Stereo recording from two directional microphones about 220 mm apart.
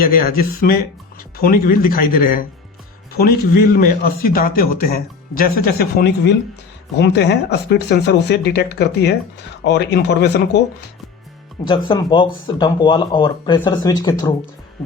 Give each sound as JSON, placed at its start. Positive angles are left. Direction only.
{"t": 0.0, "sound": "a man's voice", "side_deg": 40}
{"t": 11.9, "sound": "speech", "side_deg": 20}